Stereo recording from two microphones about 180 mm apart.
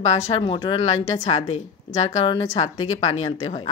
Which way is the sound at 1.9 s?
35° left (ahead or behind).